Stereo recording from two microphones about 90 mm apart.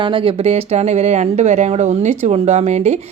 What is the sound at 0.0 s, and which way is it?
Speech, 75° right (ahead or behind).